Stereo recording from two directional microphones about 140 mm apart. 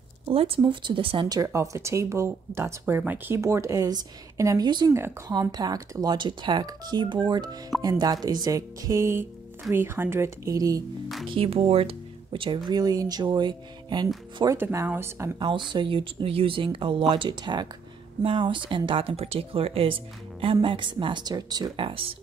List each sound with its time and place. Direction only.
0.3 s speech: 40° right (ahead or behind)
1.4 s speech: 20° right (ahead or behind)
11.2 s speech: 40° right (ahead or behind)
14.4 s speech: 20° right (ahead or behind)
15.3 s speech: 35° right (ahead or behind)